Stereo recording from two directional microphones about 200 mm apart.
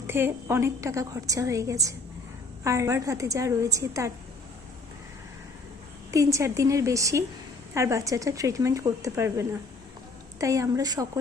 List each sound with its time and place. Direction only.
0.1 s a woman's voice: 10° right (ahead or behind)
6.1 s a woman's voice: 15° right (ahead or behind)